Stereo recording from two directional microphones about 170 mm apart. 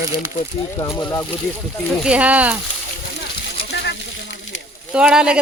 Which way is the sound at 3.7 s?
90° left.